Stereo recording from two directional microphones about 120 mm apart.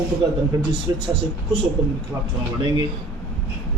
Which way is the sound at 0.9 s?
30° right (ahead or behind).